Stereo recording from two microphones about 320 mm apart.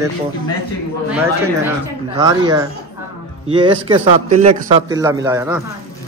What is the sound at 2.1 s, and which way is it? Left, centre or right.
A man's voice, centre.